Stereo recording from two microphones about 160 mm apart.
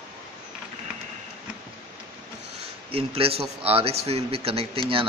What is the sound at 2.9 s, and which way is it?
Speech, 35° right (ahead or behind).